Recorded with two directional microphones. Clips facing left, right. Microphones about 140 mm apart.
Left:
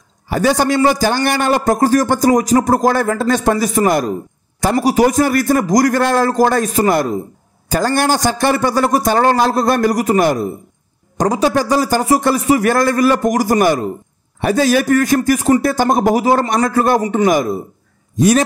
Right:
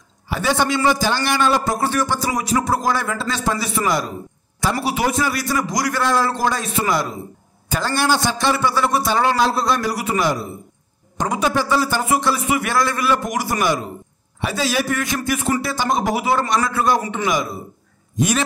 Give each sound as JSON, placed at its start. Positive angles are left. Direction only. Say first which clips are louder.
{"t": 0.3, "sound": "a man's voice", "louder": "left 5 dB", "side_deg": 45}
{"t": 11.1, "sound": "a man's voice", "louder": "left 6 dB", "side_deg": 35}
{"t": 18.1, "sound": "a man's voice", "louder": "left 8 dB", "side_deg": 35}